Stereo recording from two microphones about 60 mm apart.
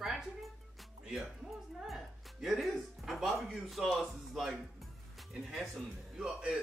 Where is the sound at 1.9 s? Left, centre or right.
Centre.